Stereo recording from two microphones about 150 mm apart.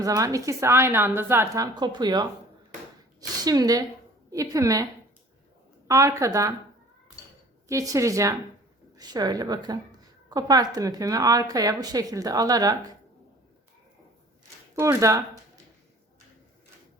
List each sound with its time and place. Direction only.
0.0 s a woman's voice: 25° right (ahead or behind)
5.9 s a woman's voice: 20° right (ahead or behind)
7.7 s a woman's voice: 20° right (ahead or behind)
14.8 s a woman's voice: 20° right (ahead or behind)